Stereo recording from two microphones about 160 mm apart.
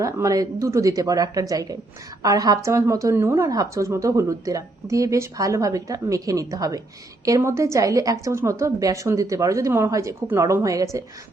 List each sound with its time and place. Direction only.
0.0 s speech: 20° right (ahead or behind)